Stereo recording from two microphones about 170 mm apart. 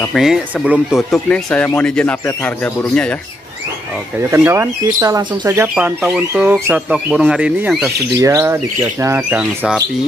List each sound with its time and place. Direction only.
0.1 s speech: centre (ahead or behind)
4.2 s speech: 15° right (ahead or behind)
8.2 s speech: 20° right (ahead or behind)